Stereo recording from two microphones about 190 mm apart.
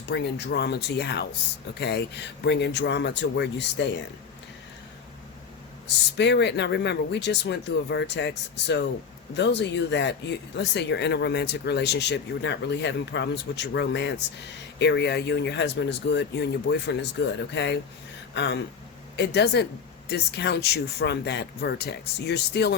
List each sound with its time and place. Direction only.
0.0 s speech: 60° left (ahead or behind)
6.1 s speech: 65° left (ahead or behind)